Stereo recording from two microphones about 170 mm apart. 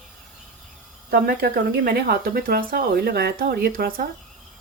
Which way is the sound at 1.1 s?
60° right (ahead or behind).